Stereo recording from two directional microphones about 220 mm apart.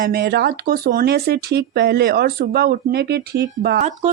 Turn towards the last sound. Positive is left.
turn(degrees=-45)  # may be behind; listen again after turning